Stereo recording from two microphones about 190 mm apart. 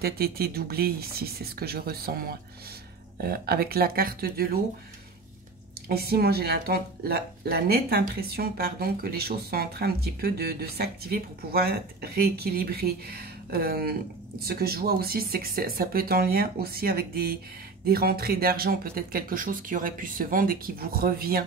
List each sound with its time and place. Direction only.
0.0 s speech: 55° right (ahead or behind)
5.9 s speech: 55° right (ahead or behind)